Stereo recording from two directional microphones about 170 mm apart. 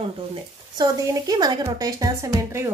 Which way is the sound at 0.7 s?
20° right (ahead or behind).